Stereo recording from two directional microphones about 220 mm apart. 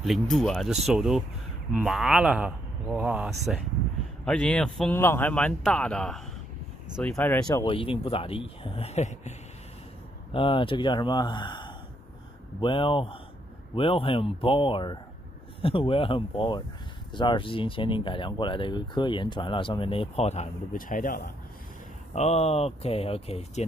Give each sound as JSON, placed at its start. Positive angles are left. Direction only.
{"t": 0.0, "sound": "speech", "side_deg": 0}
{"t": 10.3, "sound": "speech", "side_deg": 25}